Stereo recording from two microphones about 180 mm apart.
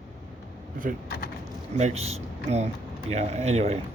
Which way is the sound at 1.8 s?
35° right (ahead or behind).